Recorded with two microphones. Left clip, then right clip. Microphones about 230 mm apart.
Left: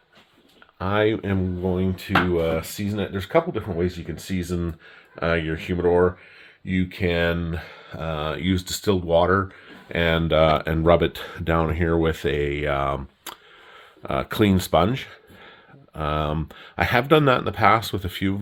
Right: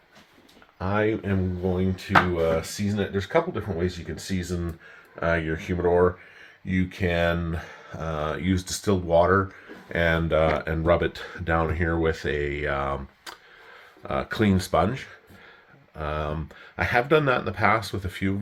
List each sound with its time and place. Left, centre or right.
0.8 s speech: left
1.8 s speech: left
5.2 s speech: left